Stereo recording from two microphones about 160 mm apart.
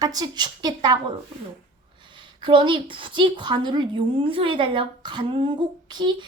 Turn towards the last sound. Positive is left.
turn(degrees=-30)  # may be behind; listen again after turning